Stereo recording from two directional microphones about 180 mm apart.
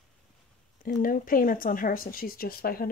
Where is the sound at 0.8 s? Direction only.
50° left (ahead or behind).